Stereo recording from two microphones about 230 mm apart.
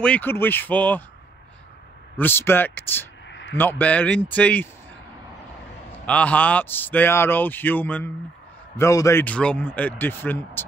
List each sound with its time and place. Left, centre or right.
0.0 s a man's voice: centre
2.1 s a man's voice: centre
3.3 s a sound: left
3.5 s a man's voice: centre
6.0 s a man's voice: centre